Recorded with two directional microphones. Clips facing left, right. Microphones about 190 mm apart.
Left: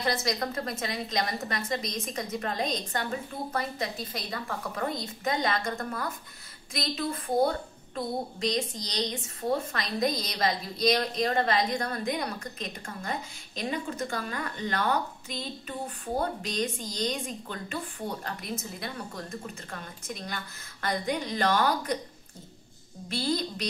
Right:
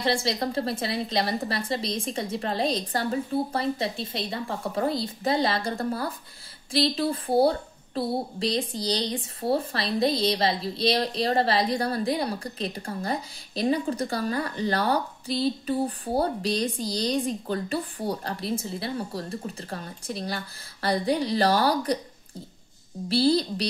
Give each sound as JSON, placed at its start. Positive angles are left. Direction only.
{"t": 0.0, "sound": "a woman's voice", "side_deg": -30}
{"t": 23.0, "sound": "a woman's voice", "side_deg": -35}